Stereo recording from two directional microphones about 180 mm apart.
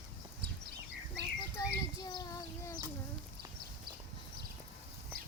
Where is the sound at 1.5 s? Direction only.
20° left (ahead or behind).